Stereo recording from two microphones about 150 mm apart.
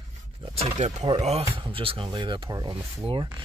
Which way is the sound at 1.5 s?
35° right (ahead or behind).